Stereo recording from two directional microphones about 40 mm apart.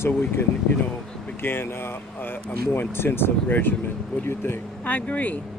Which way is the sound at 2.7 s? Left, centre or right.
Left.